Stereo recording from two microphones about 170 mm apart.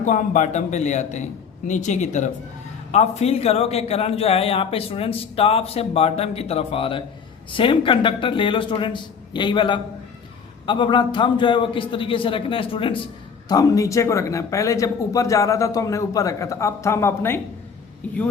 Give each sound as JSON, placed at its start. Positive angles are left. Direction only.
{"t": 0.0, "sound": "a man's voice", "side_deg": 45}
{"t": 13.5, "sound": "speech", "side_deg": 20}